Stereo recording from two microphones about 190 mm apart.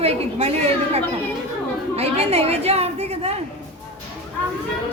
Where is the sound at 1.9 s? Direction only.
30° right (ahead or behind).